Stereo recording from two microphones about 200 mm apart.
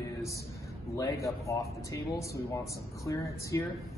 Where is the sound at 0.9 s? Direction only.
15° left (ahead or behind).